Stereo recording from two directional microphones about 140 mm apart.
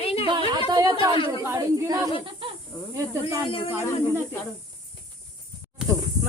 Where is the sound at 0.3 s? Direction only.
35° right (ahead or behind).